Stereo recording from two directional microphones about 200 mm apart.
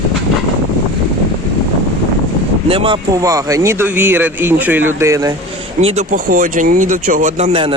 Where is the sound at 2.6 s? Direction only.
25° right (ahead or behind).